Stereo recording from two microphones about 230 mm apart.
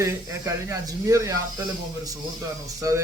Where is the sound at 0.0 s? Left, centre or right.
Centre.